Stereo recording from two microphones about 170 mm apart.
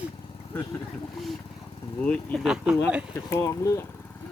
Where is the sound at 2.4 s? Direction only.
5° right (ahead or behind).